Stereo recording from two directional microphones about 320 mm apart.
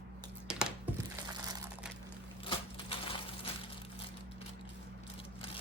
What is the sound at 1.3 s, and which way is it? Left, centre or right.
Crumpling, centre.